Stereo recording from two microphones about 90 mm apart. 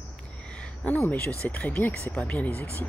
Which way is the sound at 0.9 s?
15° left (ahead or behind).